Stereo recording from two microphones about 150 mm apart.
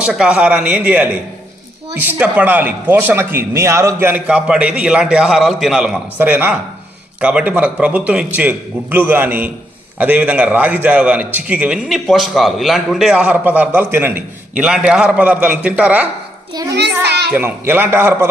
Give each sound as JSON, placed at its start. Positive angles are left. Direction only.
{"t": 0.0, "sound": "a man's voice", "side_deg": -5}
{"t": 17.1, "sound": "a sound", "side_deg": -90}
{"t": 17.3, "sound": "a man's voice", "side_deg": -15}